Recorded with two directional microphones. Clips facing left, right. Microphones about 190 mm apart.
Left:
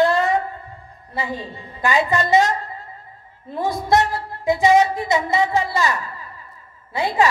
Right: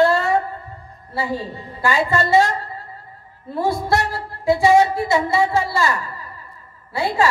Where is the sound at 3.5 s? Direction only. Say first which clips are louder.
Left 1 dB; 20° left (ahead or behind).